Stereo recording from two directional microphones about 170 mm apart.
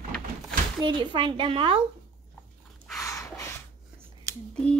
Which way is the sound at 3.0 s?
15° left (ahead or behind).